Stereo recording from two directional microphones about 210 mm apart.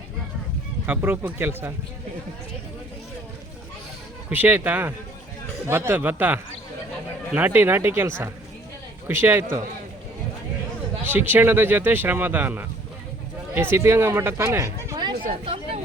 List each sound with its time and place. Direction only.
0.9 s speech: 10° right (ahead or behind)
4.3 s speech: 10° right (ahead or behind)
11.0 s speech: 10° right (ahead or behind)
15.1 s a sound: 40° right (ahead or behind)
15.4 s speech: 25° right (ahead or behind)